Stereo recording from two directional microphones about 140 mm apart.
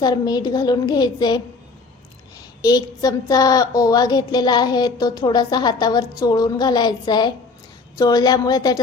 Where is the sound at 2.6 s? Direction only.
30° left (ahead or behind).